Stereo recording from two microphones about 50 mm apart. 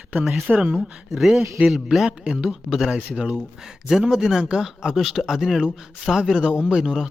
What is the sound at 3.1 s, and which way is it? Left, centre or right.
Speech, centre.